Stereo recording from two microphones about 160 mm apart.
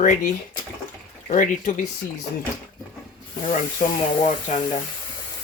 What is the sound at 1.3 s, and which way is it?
Speech, 50° left (ahead or behind).